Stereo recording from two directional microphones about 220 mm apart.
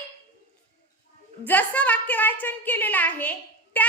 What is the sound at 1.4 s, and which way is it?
A woman's voice, 5° left (ahead or behind).